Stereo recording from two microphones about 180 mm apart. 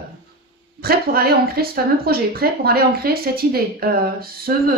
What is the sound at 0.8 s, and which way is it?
Speech, 60° right (ahead or behind).